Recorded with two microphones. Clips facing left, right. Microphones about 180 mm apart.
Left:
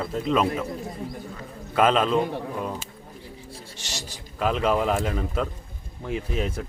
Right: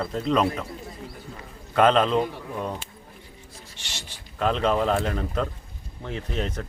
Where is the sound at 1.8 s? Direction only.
5° left (ahead or behind).